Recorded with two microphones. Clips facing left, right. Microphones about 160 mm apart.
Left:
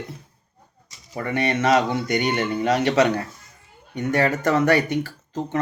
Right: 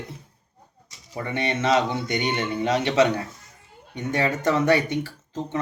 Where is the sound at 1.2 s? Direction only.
25° right (ahead or behind).